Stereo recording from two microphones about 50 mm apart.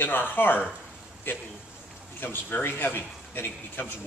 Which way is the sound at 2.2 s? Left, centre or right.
Left.